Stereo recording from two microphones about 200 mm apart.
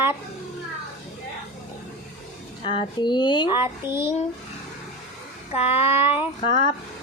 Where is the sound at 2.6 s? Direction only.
25° left (ahead or behind).